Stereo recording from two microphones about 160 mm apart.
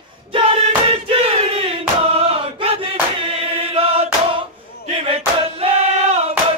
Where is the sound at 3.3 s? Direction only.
40° right (ahead or behind).